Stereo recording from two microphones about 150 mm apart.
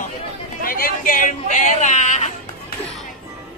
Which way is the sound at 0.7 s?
70° left (ahead or behind).